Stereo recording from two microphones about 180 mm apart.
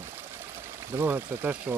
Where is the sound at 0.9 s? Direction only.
10° right (ahead or behind).